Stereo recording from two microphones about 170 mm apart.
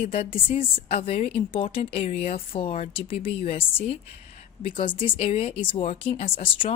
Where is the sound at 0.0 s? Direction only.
35° left (ahead or behind).